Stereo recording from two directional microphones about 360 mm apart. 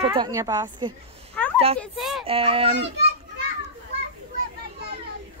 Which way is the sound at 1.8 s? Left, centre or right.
Centre.